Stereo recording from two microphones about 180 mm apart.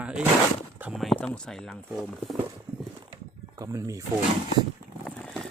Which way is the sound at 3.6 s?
20° right (ahead or behind).